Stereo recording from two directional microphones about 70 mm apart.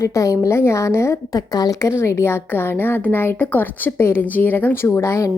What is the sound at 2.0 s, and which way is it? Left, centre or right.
A woman's voice, left.